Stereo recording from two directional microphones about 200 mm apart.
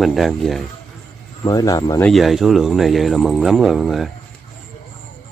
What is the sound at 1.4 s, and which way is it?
Speech, 20° left (ahead or behind).